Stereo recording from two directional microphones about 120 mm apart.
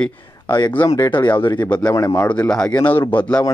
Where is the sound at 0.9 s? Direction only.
35° left (ahead or behind).